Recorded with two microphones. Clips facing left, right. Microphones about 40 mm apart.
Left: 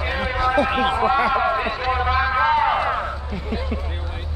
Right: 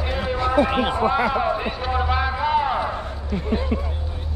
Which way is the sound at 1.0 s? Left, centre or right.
Left.